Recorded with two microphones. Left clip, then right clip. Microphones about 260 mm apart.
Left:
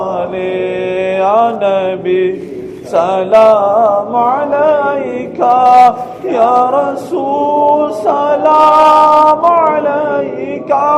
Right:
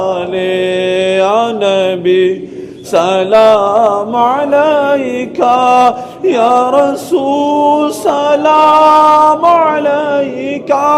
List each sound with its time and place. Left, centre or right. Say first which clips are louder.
0.0 s mantra: right 2 dB; right
10.7 s music: even; right